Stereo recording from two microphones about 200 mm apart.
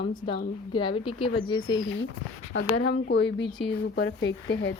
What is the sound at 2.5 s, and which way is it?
Speech, 60° left (ahead or behind).